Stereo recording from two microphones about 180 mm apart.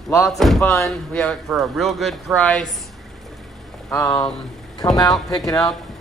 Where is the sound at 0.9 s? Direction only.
Centre (ahead or behind).